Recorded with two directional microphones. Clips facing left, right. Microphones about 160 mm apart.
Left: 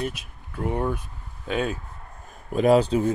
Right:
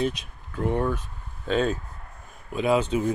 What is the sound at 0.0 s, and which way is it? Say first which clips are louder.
Speech: right 4 dB; 5° left (ahead or behind).